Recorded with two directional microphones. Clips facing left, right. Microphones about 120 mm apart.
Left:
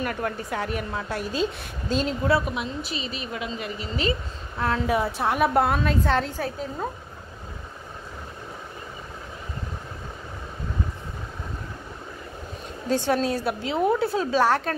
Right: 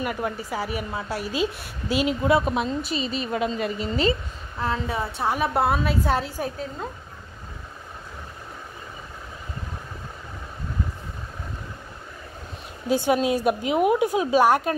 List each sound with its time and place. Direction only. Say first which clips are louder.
0.0 s a woman's voice: right 1 dB; 5° right (ahead or behind)
2.4 s speech: right 5 dB; 35° right (ahead or behind)
4.6 s a woman's voice: left 3 dB; centre (ahead or behind)
12.8 s a woman's voice: right 2 dB; 10° right (ahead or behind)